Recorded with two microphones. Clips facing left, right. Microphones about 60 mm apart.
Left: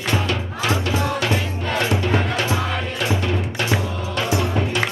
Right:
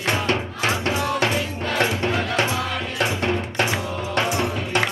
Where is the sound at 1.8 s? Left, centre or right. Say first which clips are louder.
Even; right.